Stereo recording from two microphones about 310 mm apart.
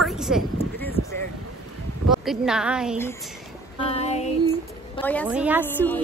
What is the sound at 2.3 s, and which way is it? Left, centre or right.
Speech, centre.